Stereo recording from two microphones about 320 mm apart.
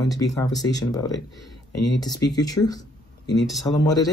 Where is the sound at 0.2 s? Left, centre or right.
Centre.